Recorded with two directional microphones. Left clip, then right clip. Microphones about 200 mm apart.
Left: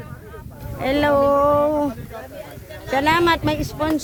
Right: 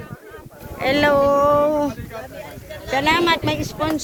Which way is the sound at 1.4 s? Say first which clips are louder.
Right 1 dB; 20° left (ahead or behind).